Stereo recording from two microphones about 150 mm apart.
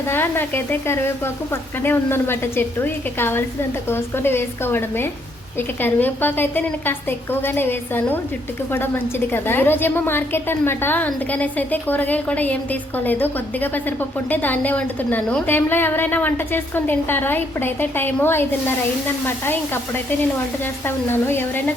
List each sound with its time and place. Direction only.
0.1 s a woman's voice: 15° left (ahead or behind)